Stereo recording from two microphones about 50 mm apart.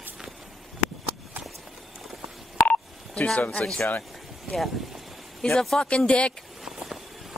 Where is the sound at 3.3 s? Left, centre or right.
Left.